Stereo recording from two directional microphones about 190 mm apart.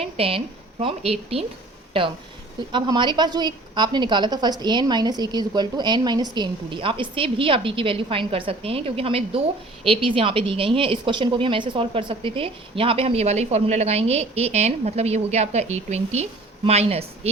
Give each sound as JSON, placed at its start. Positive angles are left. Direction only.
{"t": 0.0, "sound": "a woman's voice", "side_deg": -30}
{"t": 2.7, "sound": "a woman's voice", "side_deg": -25}